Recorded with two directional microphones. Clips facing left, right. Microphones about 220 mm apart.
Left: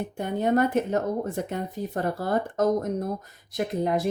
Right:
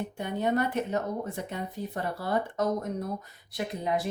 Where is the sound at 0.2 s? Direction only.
45° left (ahead or behind).